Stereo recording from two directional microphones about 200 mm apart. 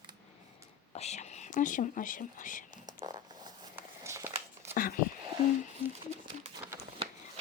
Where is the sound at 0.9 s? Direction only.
35° left (ahead or behind).